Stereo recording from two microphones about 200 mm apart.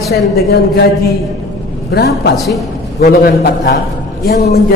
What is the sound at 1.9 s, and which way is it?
Speech, 55° left (ahead or behind).